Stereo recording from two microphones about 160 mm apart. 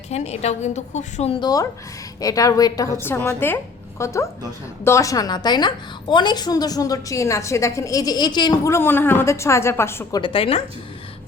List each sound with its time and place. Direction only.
0.1 s a woman's voice: 45° left (ahead or behind)
1.4 s a woman's voice: 25° left (ahead or behind)
10.2 s speech: 30° left (ahead or behind)